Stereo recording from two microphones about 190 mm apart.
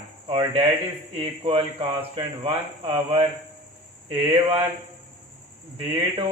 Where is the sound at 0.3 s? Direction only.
30° right (ahead or behind).